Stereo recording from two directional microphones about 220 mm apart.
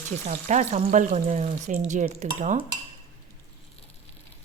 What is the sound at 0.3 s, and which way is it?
Speech, 30° right (ahead or behind).